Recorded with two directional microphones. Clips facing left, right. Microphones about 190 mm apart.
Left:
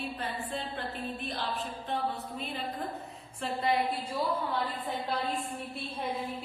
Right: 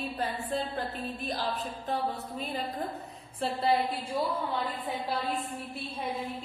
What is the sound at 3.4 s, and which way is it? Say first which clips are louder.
Speech: right 2 dB; 35° right (ahead or behind).